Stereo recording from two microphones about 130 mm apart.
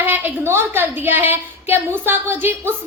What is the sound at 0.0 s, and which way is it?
A woman's voice, 15° right (ahead or behind).